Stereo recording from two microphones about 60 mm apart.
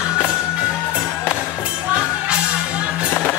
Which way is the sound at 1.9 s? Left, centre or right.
Centre.